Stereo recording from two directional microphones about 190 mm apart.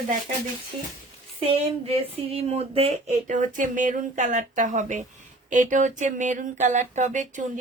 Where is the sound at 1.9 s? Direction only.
30° right (ahead or behind).